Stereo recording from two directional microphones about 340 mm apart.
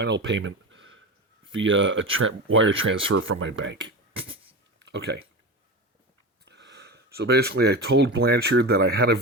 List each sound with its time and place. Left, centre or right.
0.0 s a sound: right
1.5 s speech: right
6.4 s speech: right